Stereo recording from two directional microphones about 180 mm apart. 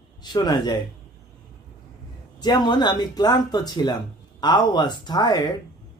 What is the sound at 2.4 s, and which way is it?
Speech, 25° left (ahead or behind).